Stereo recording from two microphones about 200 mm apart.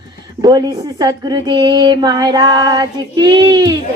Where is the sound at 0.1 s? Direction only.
20° right (ahead or behind).